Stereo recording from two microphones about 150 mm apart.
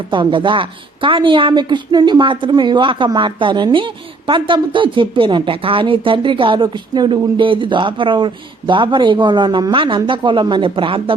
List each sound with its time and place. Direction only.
0.1 s a woman's voice: 35° right (ahead or behind)